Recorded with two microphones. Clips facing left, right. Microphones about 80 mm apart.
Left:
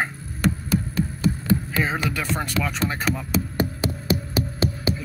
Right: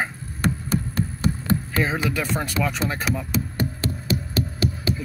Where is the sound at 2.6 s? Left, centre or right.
Centre.